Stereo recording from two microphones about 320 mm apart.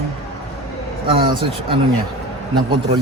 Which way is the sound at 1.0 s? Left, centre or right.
Centre.